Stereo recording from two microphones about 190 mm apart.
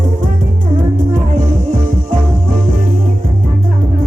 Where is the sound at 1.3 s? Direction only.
45° right (ahead or behind).